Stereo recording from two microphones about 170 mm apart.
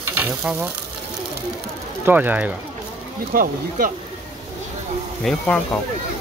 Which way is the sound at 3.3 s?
55° right (ahead or behind).